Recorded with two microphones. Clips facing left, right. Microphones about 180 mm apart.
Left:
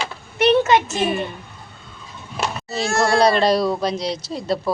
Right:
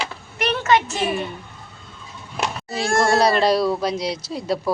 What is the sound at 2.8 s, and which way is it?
Speech, 50° right (ahead or behind).